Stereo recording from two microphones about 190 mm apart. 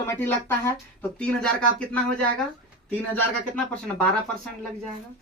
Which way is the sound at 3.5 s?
5° left (ahead or behind).